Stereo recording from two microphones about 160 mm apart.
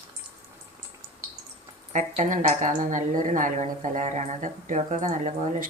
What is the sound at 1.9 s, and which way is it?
A woman's voice, 50° right (ahead or behind).